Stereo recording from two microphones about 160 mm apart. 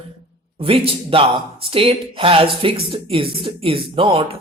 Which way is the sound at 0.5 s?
35° right (ahead or behind).